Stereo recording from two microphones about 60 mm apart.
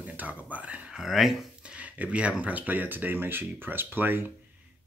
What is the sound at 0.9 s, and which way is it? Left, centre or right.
Speech, centre.